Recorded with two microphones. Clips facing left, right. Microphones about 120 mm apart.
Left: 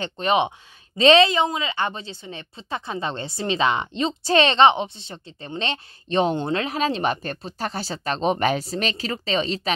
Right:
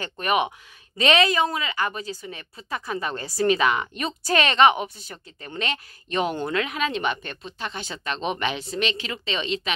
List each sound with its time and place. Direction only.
0.0 s a woman's voice: 25° left (ahead or behind)